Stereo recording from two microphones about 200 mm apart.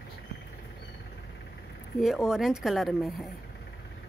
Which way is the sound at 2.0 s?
Centre (ahead or behind).